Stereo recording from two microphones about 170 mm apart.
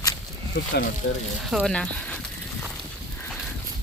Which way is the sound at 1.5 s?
5° left (ahead or behind).